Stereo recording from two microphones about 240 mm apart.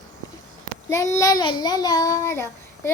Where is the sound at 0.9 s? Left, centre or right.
Centre.